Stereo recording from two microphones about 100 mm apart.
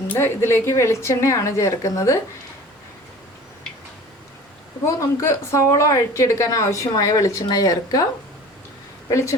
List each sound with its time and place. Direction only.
0.1 s a woman's voice: 25° left (ahead or behind)
4.9 s a woman's voice: 30° left (ahead or behind)
9.0 s speech: 30° left (ahead or behind)